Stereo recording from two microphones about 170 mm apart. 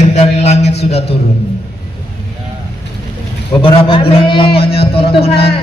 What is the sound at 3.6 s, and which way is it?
A man's voice, 30° left (ahead or behind).